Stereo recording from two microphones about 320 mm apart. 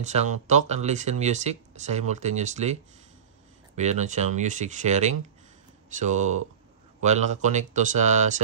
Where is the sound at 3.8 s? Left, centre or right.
Right.